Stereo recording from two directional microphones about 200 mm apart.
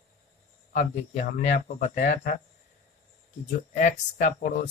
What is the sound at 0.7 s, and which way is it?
Speech, 40° left (ahead or behind).